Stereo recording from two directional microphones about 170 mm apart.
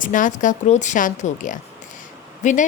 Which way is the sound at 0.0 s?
50° left (ahead or behind).